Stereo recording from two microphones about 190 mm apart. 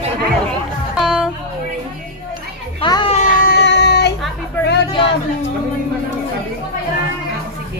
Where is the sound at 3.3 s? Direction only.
55° left (ahead or behind).